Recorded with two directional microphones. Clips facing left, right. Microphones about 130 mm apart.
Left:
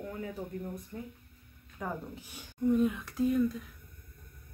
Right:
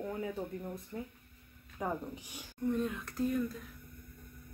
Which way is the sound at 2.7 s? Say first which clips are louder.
Left 6 dB; 5° left (ahead or behind).